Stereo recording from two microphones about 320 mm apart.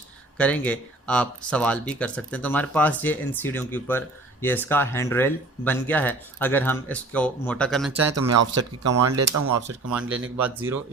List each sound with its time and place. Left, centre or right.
0.3 s speech: centre
8.1 s speech: right
9.6 s speech: centre